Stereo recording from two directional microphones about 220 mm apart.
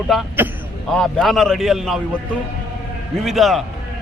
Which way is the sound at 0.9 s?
Centre (ahead or behind).